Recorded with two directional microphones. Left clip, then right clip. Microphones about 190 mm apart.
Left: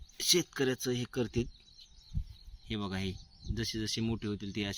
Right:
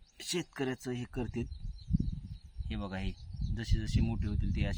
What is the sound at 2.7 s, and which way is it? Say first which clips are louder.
Speech: left 3 dB; 15° left (ahead or behind).